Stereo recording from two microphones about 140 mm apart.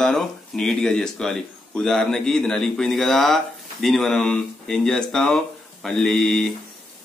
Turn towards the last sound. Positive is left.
turn(degrees=5)  # may be behind; listen again after turning